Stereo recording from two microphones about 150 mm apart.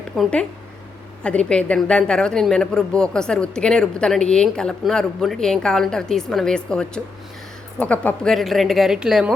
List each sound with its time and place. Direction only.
0.2 s a woman's voice: 5° left (ahead or behind)